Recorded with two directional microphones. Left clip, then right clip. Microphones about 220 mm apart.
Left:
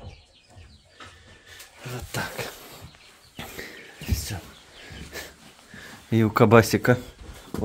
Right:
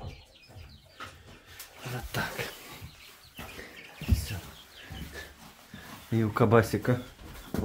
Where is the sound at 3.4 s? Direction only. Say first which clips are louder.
Left 6 dB; 35° left (ahead or behind).